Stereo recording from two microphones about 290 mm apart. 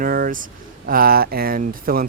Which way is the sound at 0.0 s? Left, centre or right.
Right.